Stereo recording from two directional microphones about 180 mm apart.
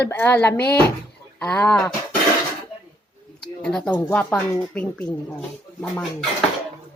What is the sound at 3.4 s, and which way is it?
A woman's voice, 5° left (ahead or behind).